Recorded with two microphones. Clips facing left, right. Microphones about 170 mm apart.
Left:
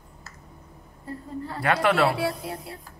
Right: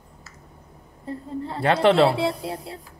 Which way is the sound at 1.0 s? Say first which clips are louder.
Right 3 dB; 25° right (ahead or behind).